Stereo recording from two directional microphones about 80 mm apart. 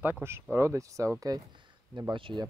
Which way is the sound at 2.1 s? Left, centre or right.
Right.